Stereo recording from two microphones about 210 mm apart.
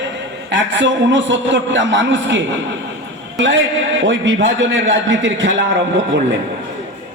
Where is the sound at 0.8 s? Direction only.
60° right (ahead or behind).